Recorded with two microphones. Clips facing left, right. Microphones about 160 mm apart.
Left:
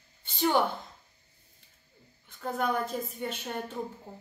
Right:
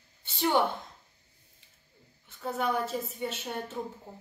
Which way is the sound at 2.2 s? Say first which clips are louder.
Even; centre (ahead or behind).